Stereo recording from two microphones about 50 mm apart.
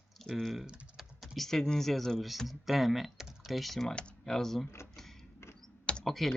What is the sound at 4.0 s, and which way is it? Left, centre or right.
Computer keyboard, left.